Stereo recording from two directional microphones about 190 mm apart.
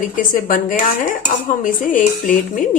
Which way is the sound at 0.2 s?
45° left (ahead or behind).